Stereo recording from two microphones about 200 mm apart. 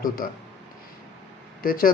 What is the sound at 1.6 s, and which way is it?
Speech, 45° left (ahead or behind).